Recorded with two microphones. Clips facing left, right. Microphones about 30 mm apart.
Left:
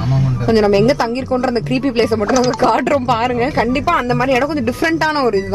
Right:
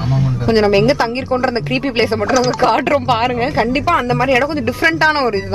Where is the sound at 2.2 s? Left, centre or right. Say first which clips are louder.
Even; centre.